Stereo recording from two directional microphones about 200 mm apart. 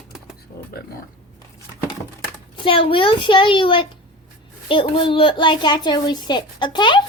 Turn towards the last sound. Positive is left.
turn(degrees=25)  # may be behind; listen again after turning